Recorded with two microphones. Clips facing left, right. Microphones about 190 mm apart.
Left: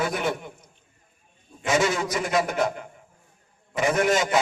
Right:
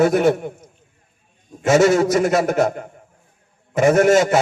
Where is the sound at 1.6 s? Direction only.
50° right (ahead or behind).